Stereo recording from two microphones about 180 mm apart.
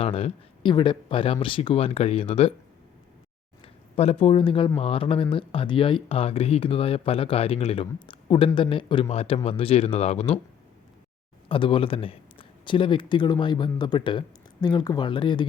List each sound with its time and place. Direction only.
0.0 s speech: 30° left (ahead or behind)
3.9 s speech: 35° left (ahead or behind)
11.4 s a man's voice: 30° left (ahead or behind)